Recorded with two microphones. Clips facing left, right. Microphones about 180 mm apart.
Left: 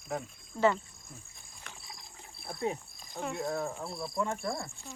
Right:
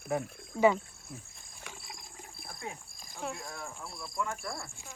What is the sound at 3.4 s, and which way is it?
Speech, 40° left (ahead or behind).